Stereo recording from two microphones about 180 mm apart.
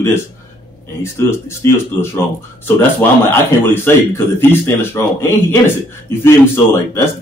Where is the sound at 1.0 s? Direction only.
15° left (ahead or behind).